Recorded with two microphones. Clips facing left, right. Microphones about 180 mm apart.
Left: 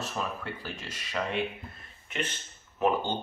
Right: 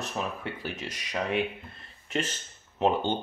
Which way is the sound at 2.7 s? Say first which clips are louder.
Right 1 dB; 25° right (ahead or behind).